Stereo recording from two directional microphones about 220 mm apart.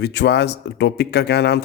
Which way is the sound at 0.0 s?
50° left (ahead or behind).